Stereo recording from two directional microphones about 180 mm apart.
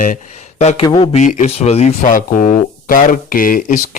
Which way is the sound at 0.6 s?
40° left (ahead or behind).